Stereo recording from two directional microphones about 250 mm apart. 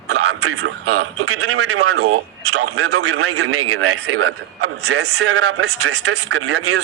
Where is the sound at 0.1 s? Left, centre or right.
Right.